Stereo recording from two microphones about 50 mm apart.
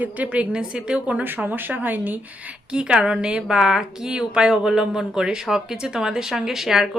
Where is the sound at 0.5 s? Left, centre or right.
Centre.